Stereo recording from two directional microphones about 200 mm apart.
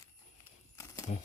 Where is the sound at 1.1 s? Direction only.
35° left (ahead or behind).